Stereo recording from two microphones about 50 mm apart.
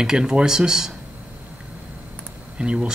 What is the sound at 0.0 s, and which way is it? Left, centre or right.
Speech, centre.